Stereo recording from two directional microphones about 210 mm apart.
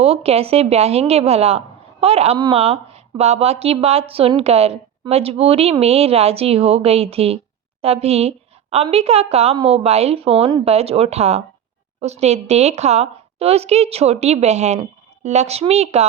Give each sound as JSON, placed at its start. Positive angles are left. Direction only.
{"t": 0.0, "sound": "a woman's voice", "side_deg": -30}